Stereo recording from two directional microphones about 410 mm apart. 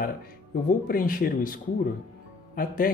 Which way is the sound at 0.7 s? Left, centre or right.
Centre.